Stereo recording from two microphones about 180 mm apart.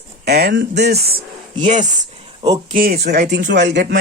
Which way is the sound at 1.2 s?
40° right (ahead or behind).